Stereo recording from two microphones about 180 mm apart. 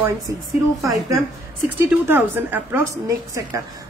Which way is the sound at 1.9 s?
10° right (ahead or behind).